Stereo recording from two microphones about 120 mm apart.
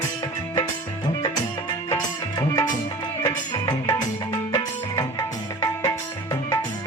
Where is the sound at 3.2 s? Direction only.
30° left (ahead or behind).